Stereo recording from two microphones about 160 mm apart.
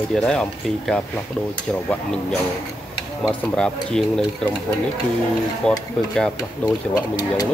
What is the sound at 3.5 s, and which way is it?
Speech, 5° left (ahead or behind).